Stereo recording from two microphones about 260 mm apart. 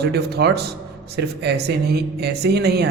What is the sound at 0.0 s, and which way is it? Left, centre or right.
Speech, right.